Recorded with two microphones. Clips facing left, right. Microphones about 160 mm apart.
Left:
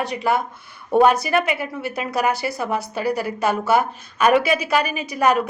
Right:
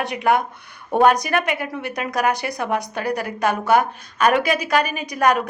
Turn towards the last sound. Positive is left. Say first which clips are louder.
# even
turn(degrees=5)  # may be behind; listen again after turning